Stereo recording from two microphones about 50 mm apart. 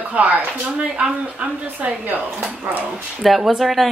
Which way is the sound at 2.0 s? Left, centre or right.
Right.